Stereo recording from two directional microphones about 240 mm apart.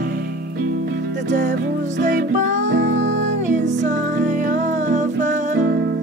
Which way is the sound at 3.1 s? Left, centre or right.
Right.